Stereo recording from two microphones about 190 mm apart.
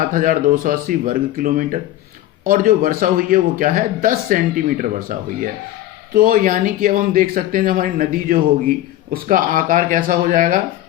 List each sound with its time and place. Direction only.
0.0 s a man's voice: 45° right (ahead or behind)